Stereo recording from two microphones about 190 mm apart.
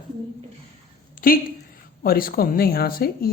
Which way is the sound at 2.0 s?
50° left (ahead or behind).